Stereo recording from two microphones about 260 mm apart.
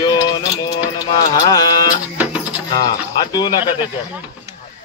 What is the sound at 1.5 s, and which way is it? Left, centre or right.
Speech, centre.